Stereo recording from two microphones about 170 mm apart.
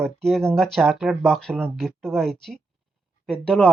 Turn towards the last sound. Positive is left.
turn(degrees=5)  # may be behind; listen again after turning